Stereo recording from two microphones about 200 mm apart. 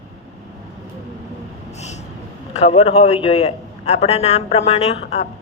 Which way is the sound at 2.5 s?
30° left (ahead or behind).